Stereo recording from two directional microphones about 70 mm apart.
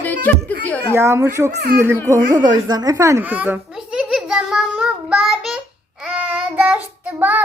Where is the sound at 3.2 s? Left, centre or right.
Right.